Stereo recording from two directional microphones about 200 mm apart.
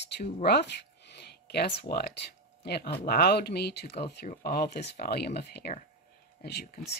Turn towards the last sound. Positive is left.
turn(degrees=50)  # may be behind; listen again after turning